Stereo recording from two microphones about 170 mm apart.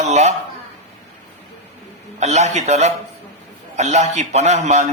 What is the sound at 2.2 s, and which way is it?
Speech, 45° right (ahead or behind).